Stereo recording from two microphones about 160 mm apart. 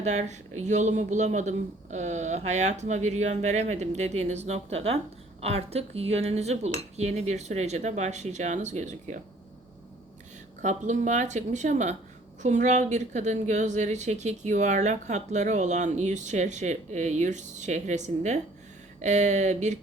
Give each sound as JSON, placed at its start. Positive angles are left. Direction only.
{"t": 0.0, "sound": "a woman's voice", "side_deg": -45}
{"t": 10.6, "sound": "a woman's voice", "side_deg": -50}